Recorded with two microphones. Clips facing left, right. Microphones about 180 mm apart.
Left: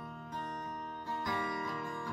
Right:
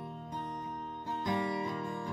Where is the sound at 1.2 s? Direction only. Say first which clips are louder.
Right 5 dB; 20° right (ahead or behind).